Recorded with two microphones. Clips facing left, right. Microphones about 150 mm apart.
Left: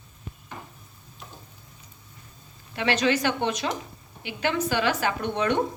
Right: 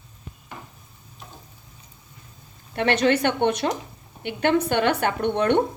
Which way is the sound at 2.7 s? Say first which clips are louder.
Right 4 dB; 55° right (ahead or behind).